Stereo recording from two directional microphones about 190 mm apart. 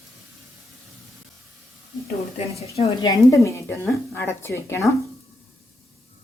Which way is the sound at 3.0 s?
15° left (ahead or behind).